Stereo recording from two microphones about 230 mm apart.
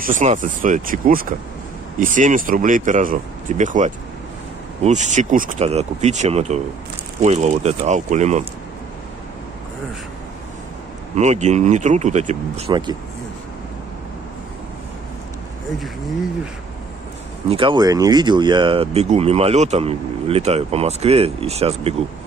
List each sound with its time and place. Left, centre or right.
0.0 s speech: right
11.1 s speech: right
17.5 s speech: right